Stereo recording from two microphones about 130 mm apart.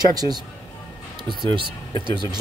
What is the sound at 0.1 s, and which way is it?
Speech, 30° right (ahead or behind).